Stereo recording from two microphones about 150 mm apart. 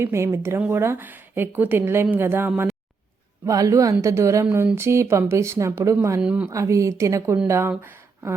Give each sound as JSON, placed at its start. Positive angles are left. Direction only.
{"t": 0.0, "sound": "a woman's voice", "side_deg": -20}
{"t": 6.5, "sound": "speech", "side_deg": -20}